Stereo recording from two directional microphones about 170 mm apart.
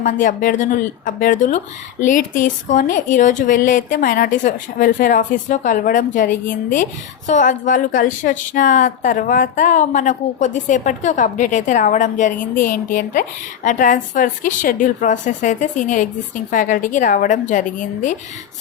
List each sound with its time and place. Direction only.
0.0 s speech: 50° left (ahead or behind)